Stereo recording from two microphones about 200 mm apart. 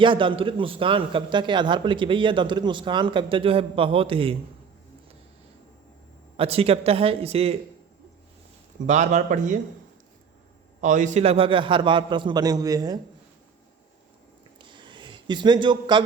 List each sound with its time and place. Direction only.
0.0 s a man's voice: 25° right (ahead or behind)
6.3 s a man's voice: 30° right (ahead or behind)
8.9 s a man's voice: 35° right (ahead or behind)
10.8 s a man's voice: 40° right (ahead or behind); by 13.0 s 20° right (ahead or behind)
14.6 s a sound: 25° right (ahead or behind)